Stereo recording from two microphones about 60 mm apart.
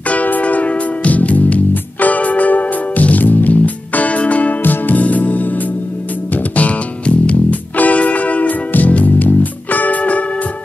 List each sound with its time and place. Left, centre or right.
0.1 s music: left